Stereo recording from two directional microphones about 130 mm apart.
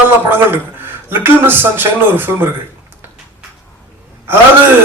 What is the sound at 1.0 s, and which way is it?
Speech, 15° right (ahead or behind).